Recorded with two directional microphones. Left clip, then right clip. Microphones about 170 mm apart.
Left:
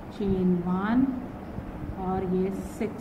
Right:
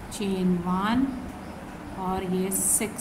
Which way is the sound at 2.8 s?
15° right (ahead or behind).